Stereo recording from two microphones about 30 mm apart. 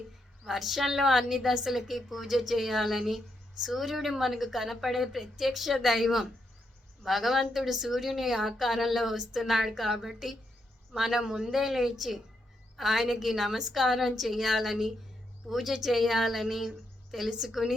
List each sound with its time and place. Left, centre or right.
0.4 s a woman's voice: centre
17.2 s a woman's voice: centre